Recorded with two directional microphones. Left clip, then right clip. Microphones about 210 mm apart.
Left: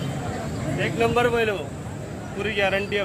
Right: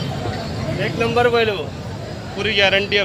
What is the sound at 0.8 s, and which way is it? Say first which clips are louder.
Speech: right 4 dB; 50° left (ahead or behind).